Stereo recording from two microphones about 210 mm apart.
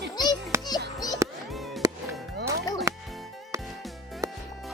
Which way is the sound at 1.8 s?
15° right (ahead or behind).